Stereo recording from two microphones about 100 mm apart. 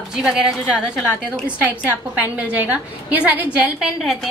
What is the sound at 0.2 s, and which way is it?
Speech, 5° right (ahead or behind).